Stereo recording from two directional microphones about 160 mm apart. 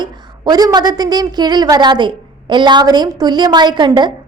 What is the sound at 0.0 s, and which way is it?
A woman's voice, 25° right (ahead or behind).